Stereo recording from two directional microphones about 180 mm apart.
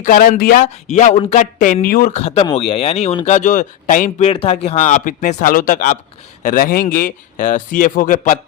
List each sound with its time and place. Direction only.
0.0 s speech: 50° left (ahead or behind)
2.1 s speech: 35° left (ahead or behind)
4.3 s speech: 35° left (ahead or behind)